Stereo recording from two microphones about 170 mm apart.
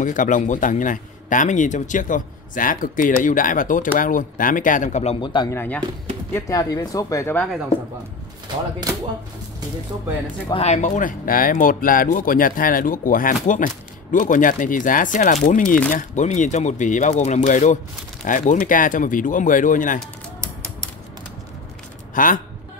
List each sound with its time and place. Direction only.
0.0 s a man's voice: 50° left (ahead or behind)
5.2 s speech: 25° left (ahead or behind)
5.5 s speech: 10° left (ahead or behind)
10.5 s a man's voice: 40° left (ahead or behind)
22.1 s a man's voice: 50° left (ahead or behind)